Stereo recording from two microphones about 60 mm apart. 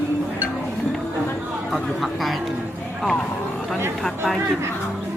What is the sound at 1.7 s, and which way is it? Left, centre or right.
Speech, centre.